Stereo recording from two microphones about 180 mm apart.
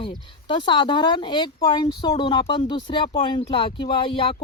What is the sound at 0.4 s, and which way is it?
Speech, 25° left (ahead or behind).